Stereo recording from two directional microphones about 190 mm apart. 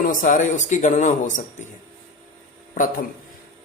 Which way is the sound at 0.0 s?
45° left (ahead or behind).